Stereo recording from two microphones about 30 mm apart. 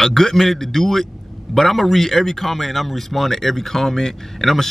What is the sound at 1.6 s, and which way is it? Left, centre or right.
A man's voice, centre.